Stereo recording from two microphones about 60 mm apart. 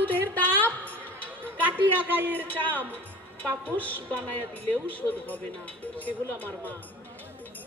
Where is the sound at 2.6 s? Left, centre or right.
Left.